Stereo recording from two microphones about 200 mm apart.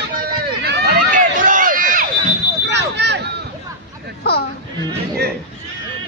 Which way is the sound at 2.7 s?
60° right (ahead or behind).